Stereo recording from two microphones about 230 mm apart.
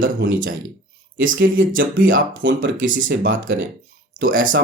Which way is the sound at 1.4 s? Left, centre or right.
Right.